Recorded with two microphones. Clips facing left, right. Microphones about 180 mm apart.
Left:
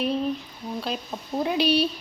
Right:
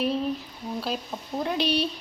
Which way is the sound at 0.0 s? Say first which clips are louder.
Left 1 dB; centre (ahead or behind).